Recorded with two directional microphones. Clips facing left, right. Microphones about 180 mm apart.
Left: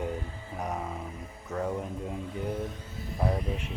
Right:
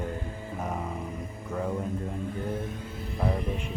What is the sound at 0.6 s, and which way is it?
Speech, centre (ahead or behind).